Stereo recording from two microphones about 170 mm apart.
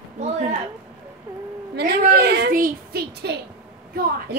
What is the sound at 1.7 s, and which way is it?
A woman's voice, 70° right (ahead or behind).